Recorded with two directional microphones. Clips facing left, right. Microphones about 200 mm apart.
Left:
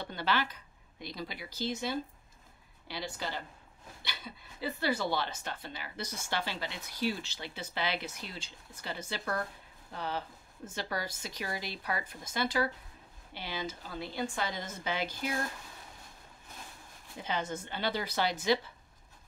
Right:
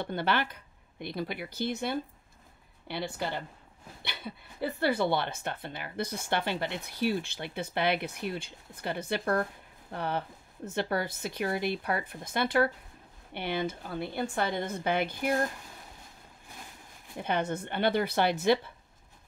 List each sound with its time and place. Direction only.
0.0 s speech: 55° right (ahead or behind)
17.2 s speech: 60° right (ahead or behind)